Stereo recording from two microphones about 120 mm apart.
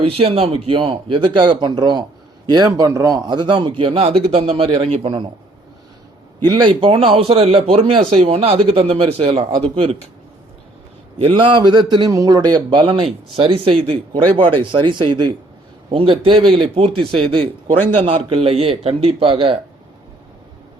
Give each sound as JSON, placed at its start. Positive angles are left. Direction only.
{"t": 0.0, "sound": "a man's voice", "side_deg": -55}
{"t": 6.5, "sound": "a man's voice", "side_deg": -45}
{"t": 11.2, "sound": "a man's voice", "side_deg": -45}